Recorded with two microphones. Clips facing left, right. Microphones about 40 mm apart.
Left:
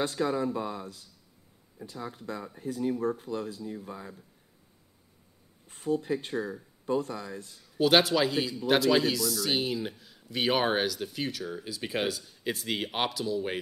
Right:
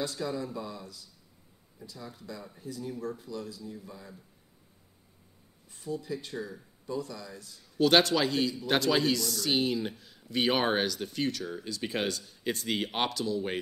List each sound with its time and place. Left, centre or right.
0.0 s speech: left
5.7 s speech: left
6.3 s speech: centre
6.9 s speech: left
7.6 s speech: centre